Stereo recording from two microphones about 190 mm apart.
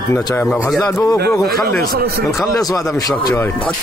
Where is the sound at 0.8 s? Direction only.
15° left (ahead or behind).